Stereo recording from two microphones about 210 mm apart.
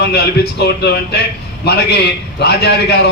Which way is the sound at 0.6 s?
50° left (ahead or behind).